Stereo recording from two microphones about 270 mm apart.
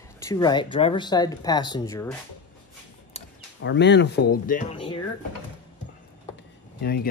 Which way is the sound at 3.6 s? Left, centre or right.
Left.